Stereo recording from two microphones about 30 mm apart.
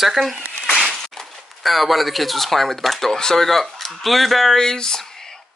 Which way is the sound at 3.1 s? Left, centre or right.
Centre.